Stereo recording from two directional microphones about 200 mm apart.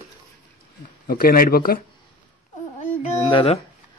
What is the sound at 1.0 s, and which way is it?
Speech, 45° left (ahead or behind).